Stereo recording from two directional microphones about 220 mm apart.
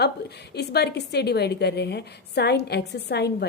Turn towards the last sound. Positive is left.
turn(degrees=50)  # may be behind; listen again after turning